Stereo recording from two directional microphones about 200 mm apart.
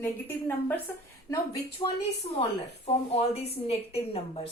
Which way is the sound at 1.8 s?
25° left (ahead or behind).